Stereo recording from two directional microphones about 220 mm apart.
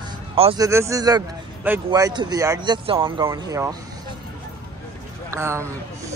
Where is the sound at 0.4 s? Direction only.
25° right (ahead or behind).